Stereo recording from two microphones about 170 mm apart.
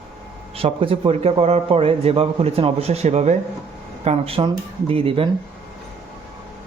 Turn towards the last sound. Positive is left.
turn(degrees=-30)  # may be behind; listen again after turning